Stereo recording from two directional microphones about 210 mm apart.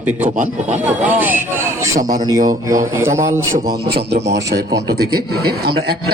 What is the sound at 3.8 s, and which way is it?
Speech, 50° right (ahead or behind).